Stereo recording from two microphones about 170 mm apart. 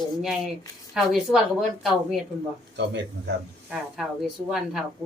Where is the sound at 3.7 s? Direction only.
Centre (ahead or behind).